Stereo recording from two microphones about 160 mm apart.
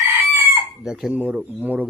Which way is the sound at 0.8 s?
5° right (ahead or behind).